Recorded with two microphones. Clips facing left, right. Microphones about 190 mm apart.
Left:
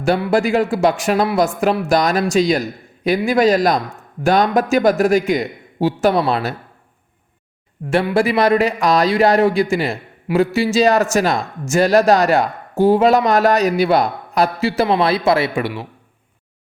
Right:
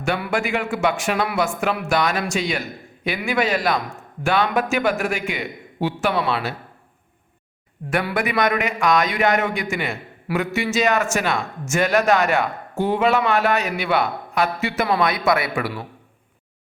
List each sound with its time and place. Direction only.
0.0 s a man's voice: 35° left (ahead or behind)
7.9 s a man's voice: 30° left (ahead or behind)